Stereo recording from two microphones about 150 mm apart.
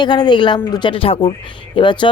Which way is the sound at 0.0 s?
30° left (ahead or behind).